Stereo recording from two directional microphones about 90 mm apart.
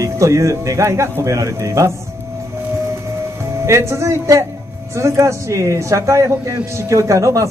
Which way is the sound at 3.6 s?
30° right (ahead or behind).